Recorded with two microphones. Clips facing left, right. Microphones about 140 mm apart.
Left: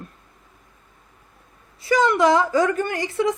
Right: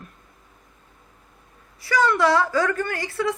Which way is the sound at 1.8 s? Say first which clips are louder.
Left 2 dB; 20° left (ahead or behind).